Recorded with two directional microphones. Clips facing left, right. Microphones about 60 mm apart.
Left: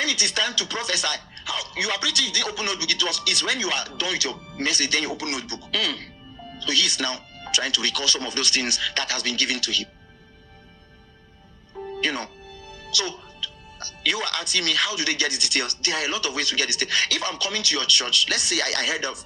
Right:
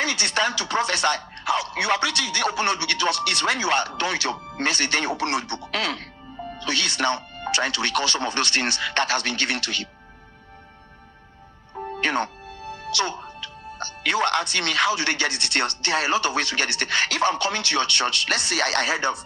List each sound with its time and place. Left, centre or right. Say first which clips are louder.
0.0 s speech: right 2 dB; right
11.7 s speech: right 3 dB; right